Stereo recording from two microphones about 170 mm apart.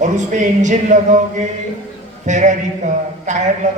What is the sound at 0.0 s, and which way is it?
Speech, 45° right (ahead or behind).